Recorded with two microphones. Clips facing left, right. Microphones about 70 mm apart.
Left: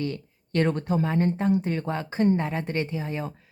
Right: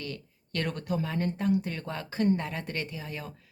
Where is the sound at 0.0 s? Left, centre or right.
Left.